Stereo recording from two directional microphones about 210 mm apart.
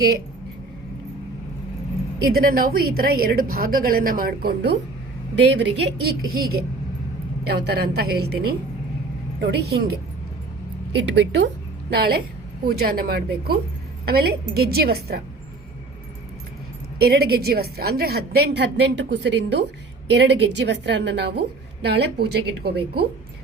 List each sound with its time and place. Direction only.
2.2 s a woman's voice: 45° right (ahead or behind)
11.3 s a woman's voice: 55° right (ahead or behind)
17.0 s a woman's voice: 50° right (ahead or behind)